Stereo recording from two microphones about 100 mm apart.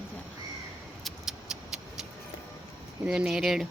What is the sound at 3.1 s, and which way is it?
Speech, 5° right (ahead or behind).